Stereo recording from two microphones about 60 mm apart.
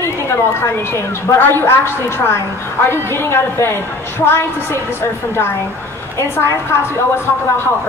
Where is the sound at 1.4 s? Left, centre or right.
Left.